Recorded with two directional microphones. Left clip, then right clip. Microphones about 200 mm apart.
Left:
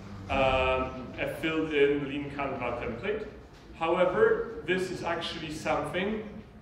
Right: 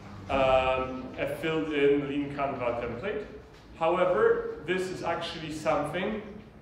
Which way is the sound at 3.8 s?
20° right (ahead or behind).